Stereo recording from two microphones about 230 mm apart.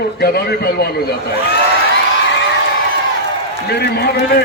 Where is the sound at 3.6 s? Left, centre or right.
Left.